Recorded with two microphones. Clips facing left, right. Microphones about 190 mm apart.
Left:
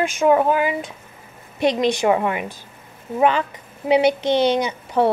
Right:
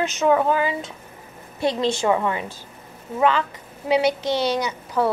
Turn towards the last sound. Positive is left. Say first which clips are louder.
# left 3 dB
turn(degrees=25)  # may be behind; listen again after turning